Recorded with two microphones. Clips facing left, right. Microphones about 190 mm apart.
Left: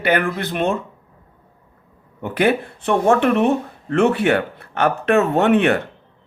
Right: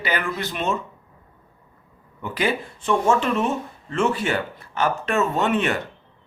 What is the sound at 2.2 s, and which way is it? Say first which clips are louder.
Speech: left 6 dB; 55° left (ahead or behind).